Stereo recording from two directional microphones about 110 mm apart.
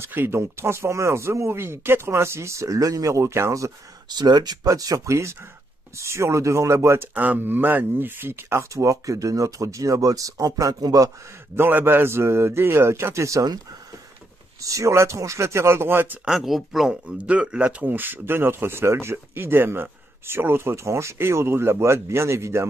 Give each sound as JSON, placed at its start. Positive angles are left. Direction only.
{"t": 0.0, "sound": "speech", "side_deg": -20}
{"t": 4.1, "sound": "speech", "side_deg": -40}
{"t": 11.5, "sound": "speech", "side_deg": -20}
{"t": 14.6, "sound": "speech", "side_deg": -30}
{"t": 16.3, "sound": "speech", "side_deg": 0}